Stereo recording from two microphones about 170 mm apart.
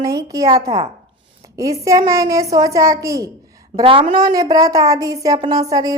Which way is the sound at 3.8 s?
30° right (ahead or behind).